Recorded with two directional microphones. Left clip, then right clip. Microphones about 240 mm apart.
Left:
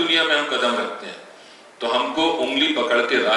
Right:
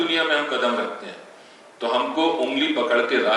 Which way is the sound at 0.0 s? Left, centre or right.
Centre.